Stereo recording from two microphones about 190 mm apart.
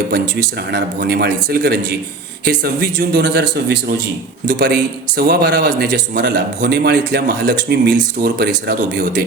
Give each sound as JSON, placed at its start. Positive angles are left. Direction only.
{"t": 0.7, "sound": "a man's voice", "side_deg": -60}